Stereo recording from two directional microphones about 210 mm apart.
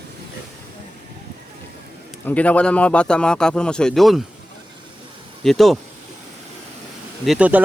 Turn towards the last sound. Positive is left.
turn(degrees=-5)  # may be behind; listen again after turning